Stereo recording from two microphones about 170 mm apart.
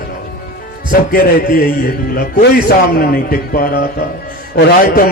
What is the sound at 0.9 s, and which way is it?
A man's voice, 60° left (ahead or behind).